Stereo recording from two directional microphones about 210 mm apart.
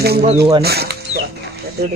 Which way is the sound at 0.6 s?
50° right (ahead or behind).